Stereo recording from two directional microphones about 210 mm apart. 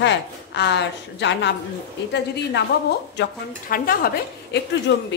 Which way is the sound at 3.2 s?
45° left (ahead or behind).